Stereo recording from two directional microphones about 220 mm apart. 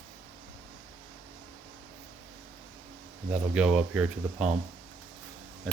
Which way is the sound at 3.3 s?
5° right (ahead or behind).